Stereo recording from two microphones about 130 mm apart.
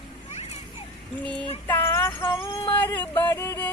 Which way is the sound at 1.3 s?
15° left (ahead or behind).